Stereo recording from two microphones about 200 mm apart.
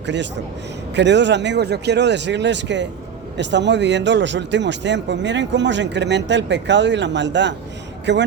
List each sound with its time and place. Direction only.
0.0 s a man's voice: 60° right (ahead or behind)